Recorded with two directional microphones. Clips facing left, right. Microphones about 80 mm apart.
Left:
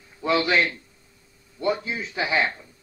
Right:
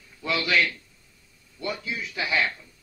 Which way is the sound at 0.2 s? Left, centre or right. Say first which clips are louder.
Left 3 dB; left.